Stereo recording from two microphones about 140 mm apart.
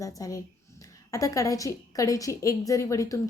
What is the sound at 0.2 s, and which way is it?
A woman's voice, 25° left (ahead or behind).